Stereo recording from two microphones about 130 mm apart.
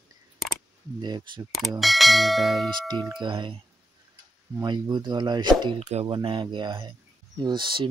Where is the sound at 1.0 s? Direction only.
35° right (ahead or behind).